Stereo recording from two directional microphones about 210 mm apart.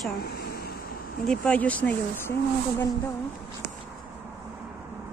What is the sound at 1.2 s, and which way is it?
Speech, 5° left (ahead or behind).